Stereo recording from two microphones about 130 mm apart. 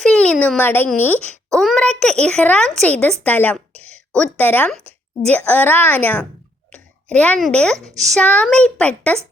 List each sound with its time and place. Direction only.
0.0 s a sound: 5° left (ahead or behind)
0.9 s a woman's voice: 15° left (ahead or behind)
1.5 s a child's voice: 5° left (ahead or behind)